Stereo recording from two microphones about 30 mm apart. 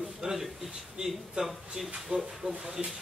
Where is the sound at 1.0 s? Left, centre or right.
Right.